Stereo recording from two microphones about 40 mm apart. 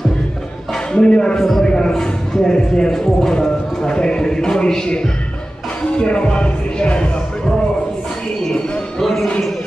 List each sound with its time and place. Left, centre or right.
0.7 s a man's voice: left
9.0 s speech: centre